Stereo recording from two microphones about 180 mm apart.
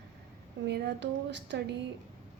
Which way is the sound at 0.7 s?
70° right (ahead or behind).